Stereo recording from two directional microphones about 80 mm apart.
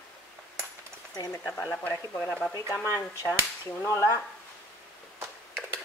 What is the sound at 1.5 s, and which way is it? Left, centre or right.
Speech, left.